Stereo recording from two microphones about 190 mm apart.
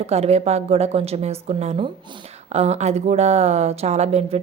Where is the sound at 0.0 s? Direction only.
35° right (ahead or behind).